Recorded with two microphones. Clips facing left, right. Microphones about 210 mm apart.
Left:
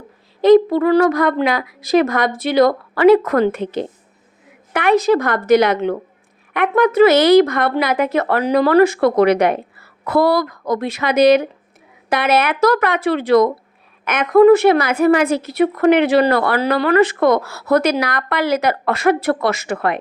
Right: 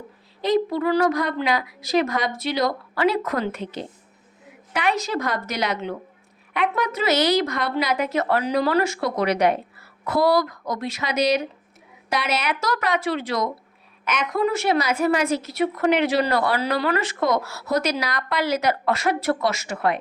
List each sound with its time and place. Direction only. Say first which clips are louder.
0.4 s a woman's voice: left 10 dB; 55° left (ahead or behind)